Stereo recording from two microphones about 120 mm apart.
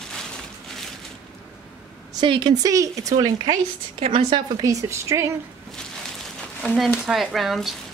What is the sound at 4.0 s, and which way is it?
Speech, 55° right (ahead or behind).